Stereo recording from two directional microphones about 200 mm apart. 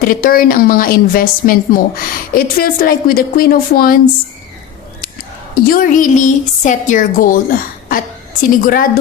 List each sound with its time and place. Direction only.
0.0 s a woman's voice: 45° left (ahead or behind)
5.5 s a woman's voice: 45° left (ahead or behind)